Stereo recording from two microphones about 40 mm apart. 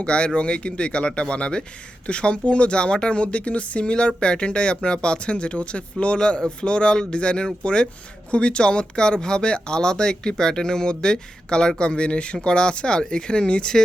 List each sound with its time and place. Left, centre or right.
0.0 s speech: left